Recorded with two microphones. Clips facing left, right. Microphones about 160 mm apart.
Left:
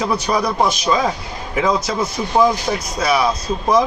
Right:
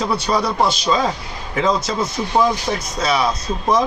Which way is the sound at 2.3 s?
5° left (ahead or behind).